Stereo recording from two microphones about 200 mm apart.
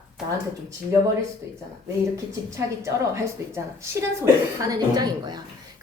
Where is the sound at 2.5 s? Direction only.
15° right (ahead or behind).